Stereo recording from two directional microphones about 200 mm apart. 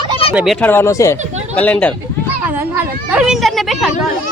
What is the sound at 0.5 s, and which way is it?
Speech, 10° left (ahead or behind).